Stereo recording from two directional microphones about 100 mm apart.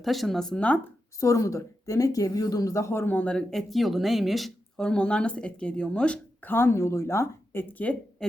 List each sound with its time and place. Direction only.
0.0 s speech: centre (ahead or behind)
1.2 s speech: 35° left (ahead or behind); by 8.3 s 15° left (ahead or behind)